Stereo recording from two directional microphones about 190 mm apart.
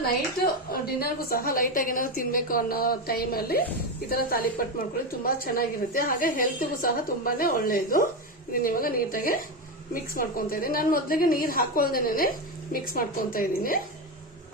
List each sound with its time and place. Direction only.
0.7 s a woman's voice: 50° left (ahead or behind)